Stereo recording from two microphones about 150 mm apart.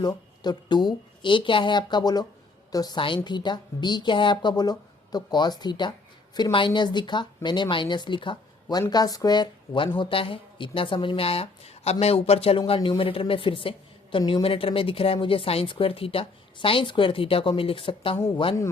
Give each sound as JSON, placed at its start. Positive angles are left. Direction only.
{"t": 0.0, "sound": "a woman's voice", "side_deg": 30}